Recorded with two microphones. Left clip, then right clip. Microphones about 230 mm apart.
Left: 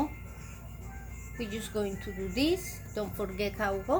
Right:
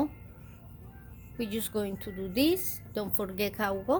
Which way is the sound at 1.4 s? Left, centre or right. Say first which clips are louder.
Right 1 dB; right.